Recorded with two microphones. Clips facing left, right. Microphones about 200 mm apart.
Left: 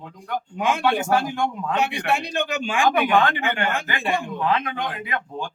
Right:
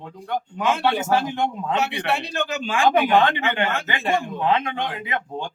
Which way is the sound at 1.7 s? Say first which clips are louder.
Left 2 dB; 15° left (ahead or behind).